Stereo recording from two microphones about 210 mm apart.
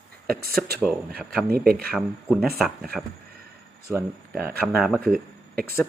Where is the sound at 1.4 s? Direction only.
45° right (ahead or behind).